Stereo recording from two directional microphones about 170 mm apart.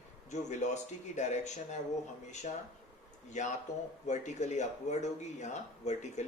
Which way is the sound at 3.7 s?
20° left (ahead or behind).